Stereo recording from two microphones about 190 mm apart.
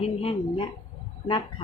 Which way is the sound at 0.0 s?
30° left (ahead or behind).